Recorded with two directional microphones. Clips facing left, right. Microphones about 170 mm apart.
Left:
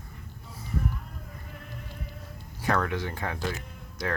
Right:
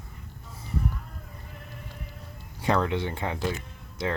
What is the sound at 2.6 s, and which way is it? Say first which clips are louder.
Speech: right 2 dB; 20° right (ahead or behind).